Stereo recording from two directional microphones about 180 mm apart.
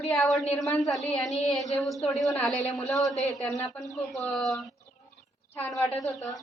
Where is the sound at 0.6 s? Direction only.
15° left (ahead or behind).